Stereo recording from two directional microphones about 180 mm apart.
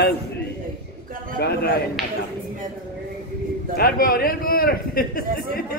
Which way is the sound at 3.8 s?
55° left (ahead or behind).